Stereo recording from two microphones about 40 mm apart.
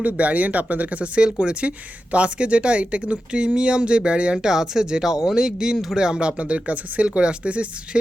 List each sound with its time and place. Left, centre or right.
0.0 s speech: right; by 6.0 s centre
6.0 s speech: right